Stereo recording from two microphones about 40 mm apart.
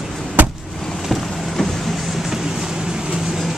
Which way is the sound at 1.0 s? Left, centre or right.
Centre.